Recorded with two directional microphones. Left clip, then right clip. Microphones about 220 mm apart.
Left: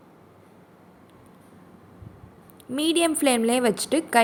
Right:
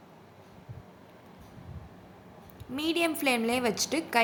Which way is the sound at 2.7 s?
20° left (ahead or behind).